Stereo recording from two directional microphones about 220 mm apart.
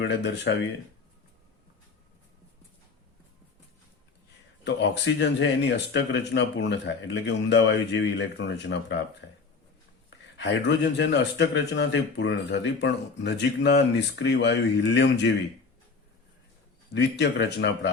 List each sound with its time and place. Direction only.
0.0 s speech: 55° left (ahead or behind)
4.6 s speech: 55° left (ahead or behind)
10.3 s speech: 55° left (ahead or behind)
16.9 s speech: 50° left (ahead or behind)